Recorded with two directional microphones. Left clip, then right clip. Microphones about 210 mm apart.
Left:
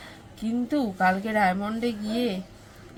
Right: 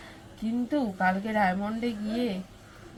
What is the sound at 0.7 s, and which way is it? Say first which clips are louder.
A woman's voice: left 3 dB; 15° left (ahead or behind).